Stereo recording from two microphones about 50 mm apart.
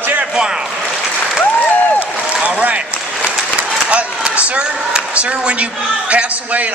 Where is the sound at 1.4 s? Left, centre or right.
Left.